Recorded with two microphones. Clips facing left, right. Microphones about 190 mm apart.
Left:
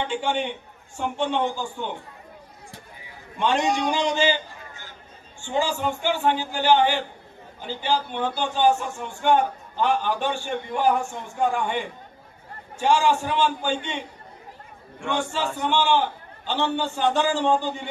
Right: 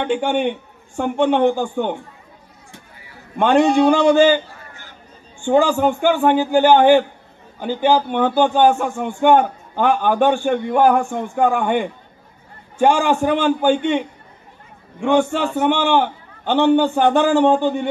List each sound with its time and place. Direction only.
0.0 s a man's voice: 55° right (ahead or behind)
3.3 s a man's voice: 55° right (ahead or behind)
5.4 s a man's voice: 55° right (ahead or behind)